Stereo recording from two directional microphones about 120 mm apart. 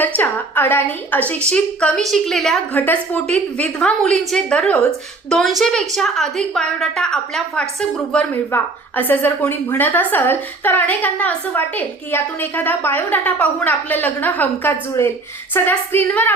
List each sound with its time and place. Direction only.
0.2 s a woman's voice: 15° left (ahead or behind)
2.7 s a woman's voice: 15° left (ahead or behind)